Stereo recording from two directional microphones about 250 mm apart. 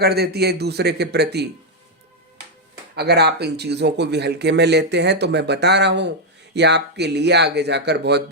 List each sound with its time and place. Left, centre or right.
0.0 s speech: right
2.9 s speech: right